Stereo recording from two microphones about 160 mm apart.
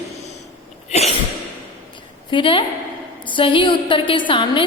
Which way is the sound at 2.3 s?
35° left (ahead or behind).